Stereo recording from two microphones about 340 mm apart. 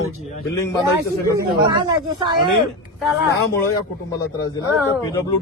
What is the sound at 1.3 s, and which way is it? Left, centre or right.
Speech, centre.